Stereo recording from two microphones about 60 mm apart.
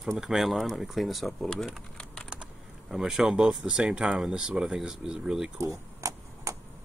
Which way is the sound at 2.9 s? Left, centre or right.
Centre.